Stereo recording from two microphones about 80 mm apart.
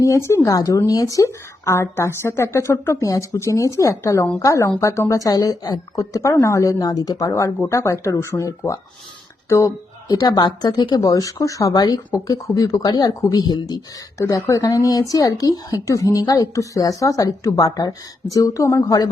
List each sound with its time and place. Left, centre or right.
0.0 s speech: left
6.0 s speech: left
10.2 s speech: left
11.7 s speech: left
12.1 s speech: left
14.2 s speech: left